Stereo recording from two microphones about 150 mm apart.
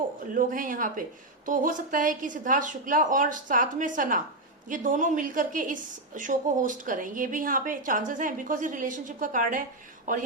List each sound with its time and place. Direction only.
0.3 s a woman's voice: 65° right (ahead or behind)